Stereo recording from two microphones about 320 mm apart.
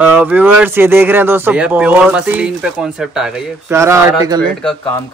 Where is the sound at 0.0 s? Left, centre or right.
Centre.